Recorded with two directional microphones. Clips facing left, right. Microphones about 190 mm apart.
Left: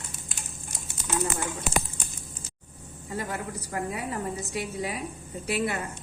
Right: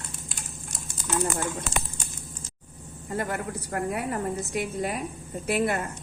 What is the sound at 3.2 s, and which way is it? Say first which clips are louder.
A woman's voice: right 3 dB; 55° right (ahead or behind).